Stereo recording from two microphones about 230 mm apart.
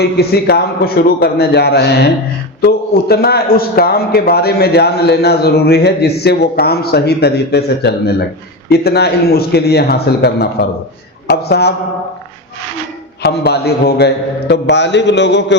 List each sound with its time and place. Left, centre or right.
0.0 s a man's voice: left
13.2 s a man's voice: left